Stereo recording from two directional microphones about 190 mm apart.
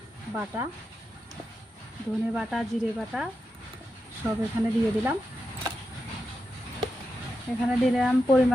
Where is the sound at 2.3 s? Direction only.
Centre (ahead or behind).